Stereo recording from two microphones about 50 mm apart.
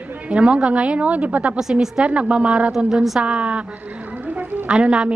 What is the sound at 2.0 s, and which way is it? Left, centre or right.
A woman's voice, right.